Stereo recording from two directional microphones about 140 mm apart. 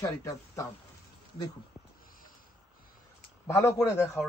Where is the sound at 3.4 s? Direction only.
20° left (ahead or behind).